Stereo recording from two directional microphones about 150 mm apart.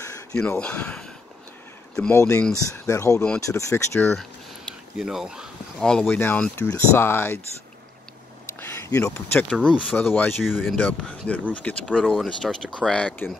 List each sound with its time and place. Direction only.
0.3 s speech: 5° left (ahead or behind)
2.0 s speech: 20° left (ahead or behind)
4.9 s speech: 5° right (ahead or behind); by 7.3 s 15° left (ahead or behind)
8.5 s speech: 20° left (ahead or behind)
10.4 s speech: centre (ahead or behind)